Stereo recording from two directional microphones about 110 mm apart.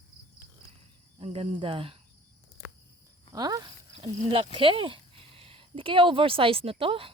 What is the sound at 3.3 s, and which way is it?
Speech, 35° right (ahead or behind).